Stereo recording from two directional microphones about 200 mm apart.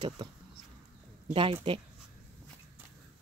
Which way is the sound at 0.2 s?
25° right (ahead or behind).